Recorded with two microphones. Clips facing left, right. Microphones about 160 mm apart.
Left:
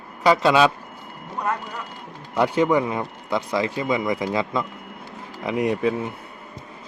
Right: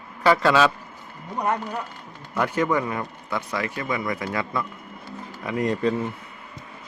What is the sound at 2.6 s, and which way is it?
Speech, 15° left (ahead or behind).